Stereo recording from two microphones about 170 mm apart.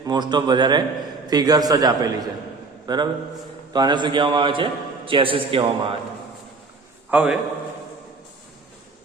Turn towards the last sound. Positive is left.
turn(degrees=-5)  # may be behind; listen again after turning